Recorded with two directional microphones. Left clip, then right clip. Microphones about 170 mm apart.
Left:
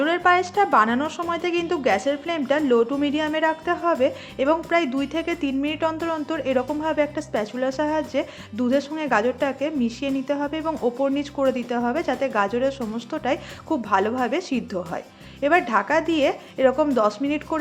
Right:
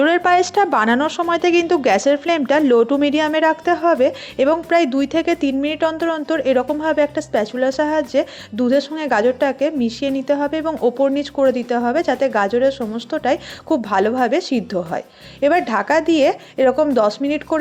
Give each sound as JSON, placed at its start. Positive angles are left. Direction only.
{"t": 0.0, "sound": "a woman's voice", "side_deg": -40}